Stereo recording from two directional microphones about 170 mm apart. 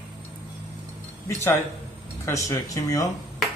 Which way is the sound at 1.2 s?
15° left (ahead or behind).